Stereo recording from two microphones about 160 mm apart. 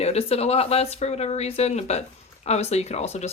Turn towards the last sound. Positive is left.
turn(degrees=45)  # may be behind; listen again after turning